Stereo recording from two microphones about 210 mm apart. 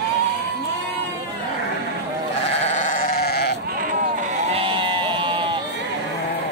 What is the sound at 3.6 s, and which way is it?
Sheep, 40° right (ahead or behind).